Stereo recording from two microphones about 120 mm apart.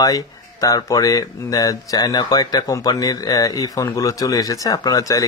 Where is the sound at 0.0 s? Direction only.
30° left (ahead or behind).